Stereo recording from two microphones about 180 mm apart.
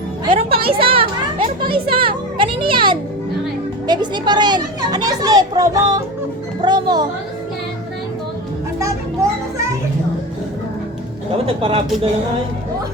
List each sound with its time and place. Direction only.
0.3 s a sound: 30° right (ahead or behind)
3.8 s speech: 25° right (ahead or behind)
11.4 s speech: 30° right (ahead or behind)